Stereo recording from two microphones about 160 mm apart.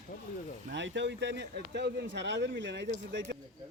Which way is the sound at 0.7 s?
90° right.